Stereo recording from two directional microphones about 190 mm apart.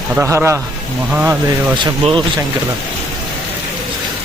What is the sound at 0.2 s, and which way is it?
Speech, 15° right (ahead or behind).